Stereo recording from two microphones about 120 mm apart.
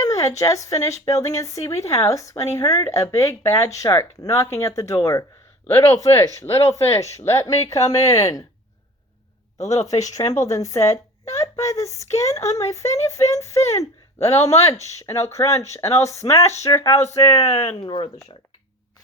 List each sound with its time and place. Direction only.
0.0 s speech: 25° left (ahead or behind)
10.4 s a woman's voice: 25° left (ahead or behind)
17.4 s speech: 65° left (ahead or behind)
17.8 s speech: 40° left (ahead or behind)